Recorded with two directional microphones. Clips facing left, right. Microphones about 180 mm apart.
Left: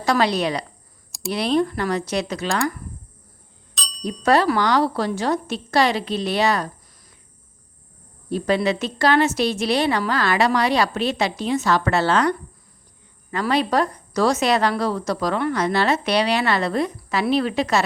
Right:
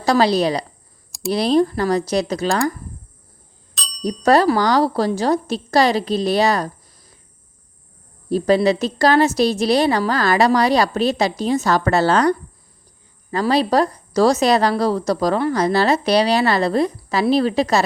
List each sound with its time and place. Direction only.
0.0 s a woman's voice: 35° right (ahead or behind)
4.0 s a woman's voice: 40° right (ahead or behind)
8.3 s a woman's voice: 35° right (ahead or behind)
13.3 s a woman's voice: 35° right (ahead or behind)